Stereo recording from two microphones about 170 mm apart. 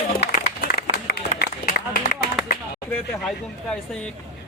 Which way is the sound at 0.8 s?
60° left (ahead or behind).